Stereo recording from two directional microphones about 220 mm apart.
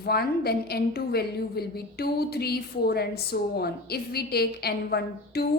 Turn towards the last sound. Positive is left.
turn(degrees=45)  # may be behind; listen again after turning